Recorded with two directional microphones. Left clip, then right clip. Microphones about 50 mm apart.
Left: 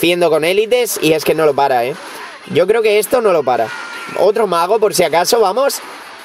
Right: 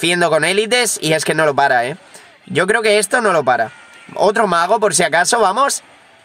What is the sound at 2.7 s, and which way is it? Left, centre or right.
Speech, left.